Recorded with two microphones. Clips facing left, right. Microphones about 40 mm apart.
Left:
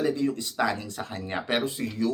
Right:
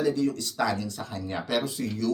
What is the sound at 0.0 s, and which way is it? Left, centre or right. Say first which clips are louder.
Speech: even; left.